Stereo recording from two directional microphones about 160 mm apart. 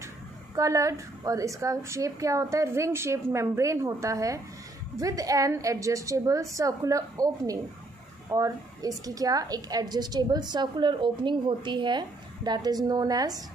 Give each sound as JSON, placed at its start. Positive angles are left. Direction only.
{"t": 0.6, "sound": "a woman's voice", "side_deg": -20}